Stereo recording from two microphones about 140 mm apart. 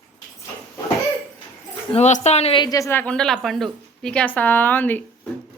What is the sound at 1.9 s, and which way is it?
Speech, 50° left (ahead or behind).